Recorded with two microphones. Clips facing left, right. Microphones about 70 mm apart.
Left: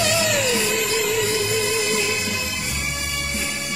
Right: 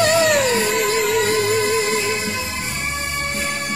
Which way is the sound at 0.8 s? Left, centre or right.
Right.